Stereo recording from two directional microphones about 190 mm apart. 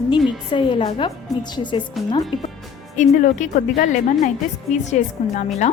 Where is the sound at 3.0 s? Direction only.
40° left (ahead or behind).